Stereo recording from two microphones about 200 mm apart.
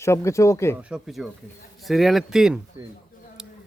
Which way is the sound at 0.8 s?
5° right (ahead or behind).